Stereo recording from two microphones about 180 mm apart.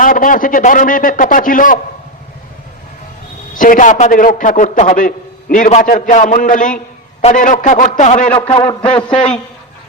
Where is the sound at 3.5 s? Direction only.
45° left (ahead or behind).